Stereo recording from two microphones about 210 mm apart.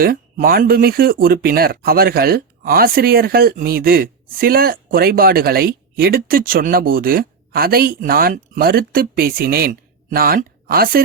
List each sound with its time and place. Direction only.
0.0 s speech: 45° right (ahead or behind)